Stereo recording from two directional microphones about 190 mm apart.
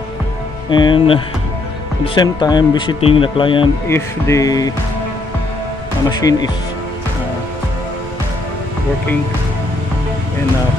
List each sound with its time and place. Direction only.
0.7 s speech: 25° left (ahead or behind)
3.9 s music: 15° left (ahead or behind)
6.0 s speech: 20° left (ahead or behind)